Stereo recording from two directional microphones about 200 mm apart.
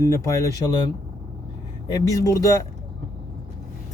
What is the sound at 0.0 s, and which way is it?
Speech, 15° left (ahead or behind).